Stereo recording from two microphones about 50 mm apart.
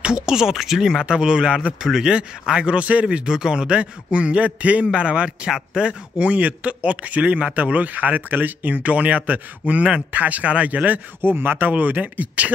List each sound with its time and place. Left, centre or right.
0.0 s a man's voice: centre
1.8 s a man's voice: centre
6.1 s a man's voice: right
11.2 s a man's voice: right